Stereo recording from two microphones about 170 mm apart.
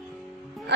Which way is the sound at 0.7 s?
85° right.